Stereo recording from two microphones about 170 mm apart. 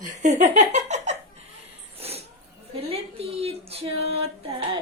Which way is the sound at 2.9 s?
35° right (ahead or behind).